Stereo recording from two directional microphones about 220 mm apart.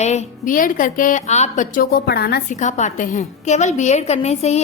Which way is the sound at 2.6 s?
35° left (ahead or behind).